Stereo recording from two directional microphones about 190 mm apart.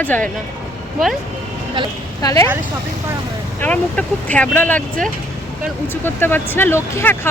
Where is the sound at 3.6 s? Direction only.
5° left (ahead or behind).